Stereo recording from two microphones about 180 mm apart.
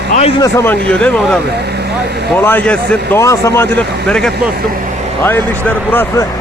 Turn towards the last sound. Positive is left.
turn(degrees=10)  # may be behind; listen again after turning